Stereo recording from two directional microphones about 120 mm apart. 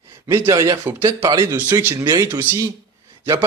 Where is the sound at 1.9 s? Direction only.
30° right (ahead or behind).